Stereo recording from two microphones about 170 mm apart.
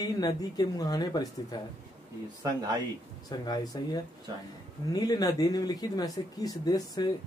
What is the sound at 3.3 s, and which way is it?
Speech, 25° left (ahead or behind).